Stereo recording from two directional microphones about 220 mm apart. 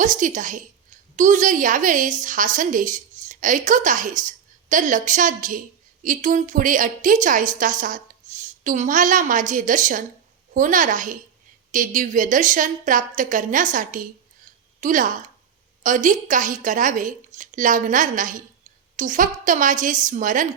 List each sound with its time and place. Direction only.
0.0 s a woman's voice: 35° right (ahead or behind)